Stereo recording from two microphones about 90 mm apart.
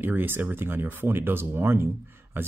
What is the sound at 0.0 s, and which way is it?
Speech, 25° right (ahead or behind).